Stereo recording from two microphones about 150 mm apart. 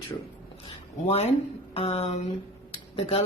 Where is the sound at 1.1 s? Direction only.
45° left (ahead or behind).